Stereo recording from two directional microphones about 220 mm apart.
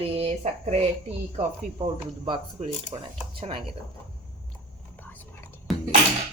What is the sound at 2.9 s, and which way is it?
Speech, 25° right (ahead or behind).